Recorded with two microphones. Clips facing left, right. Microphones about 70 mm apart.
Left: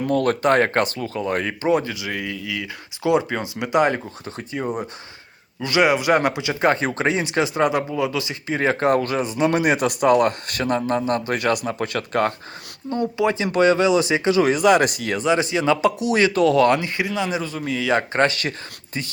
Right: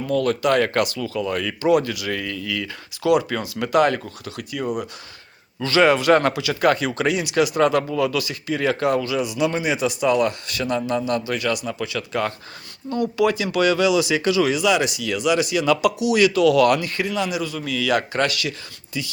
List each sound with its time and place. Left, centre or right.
0.0 s speech: left
4.3 s speech: left
5.5 s speech: centre; by 9.5 s left
9.5 s speech: left
12.9 s speech: left